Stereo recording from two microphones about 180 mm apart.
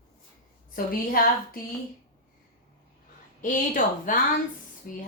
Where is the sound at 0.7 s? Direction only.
50° left (ahead or behind).